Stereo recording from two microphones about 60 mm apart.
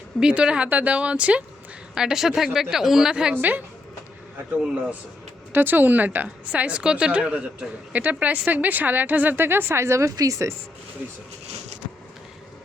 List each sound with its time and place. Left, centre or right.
0.2 s a woman's voice: centre
2.0 s speech: centre
3.3 s a woman's voice: right
5.5 s a woman's voice: right